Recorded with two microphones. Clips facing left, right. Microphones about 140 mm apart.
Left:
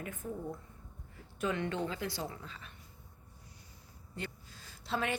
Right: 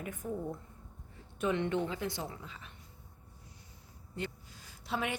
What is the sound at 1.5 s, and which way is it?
A woman's voice, 25° right (ahead or behind).